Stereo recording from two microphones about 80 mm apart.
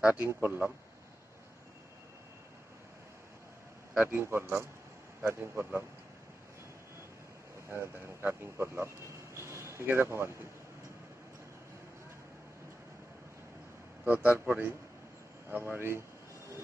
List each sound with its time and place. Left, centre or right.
0.3 s a man's voice: right
4.0 s a man's voice: right
7.7 s speech: right
14.0 s a man's voice: right